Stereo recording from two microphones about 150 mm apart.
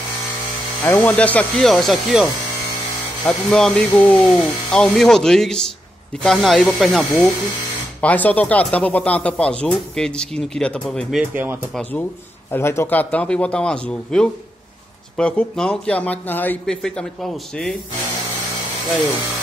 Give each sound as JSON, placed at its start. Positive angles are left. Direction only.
{"t": 0.8, "sound": "speech", "side_deg": 10}
{"t": 3.3, "sound": "speech", "side_deg": 0}
{"t": 11.3, "sound": "speech", "side_deg": -15}
{"t": 12.4, "sound": "speech", "side_deg": 15}